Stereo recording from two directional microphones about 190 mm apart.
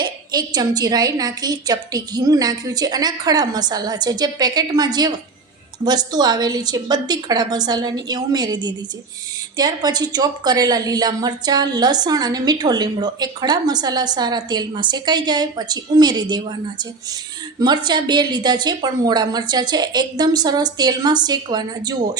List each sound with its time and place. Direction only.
0.0 s a woman's voice: 20° right (ahead or behind)
17.6 s a woman's voice: 25° right (ahead or behind)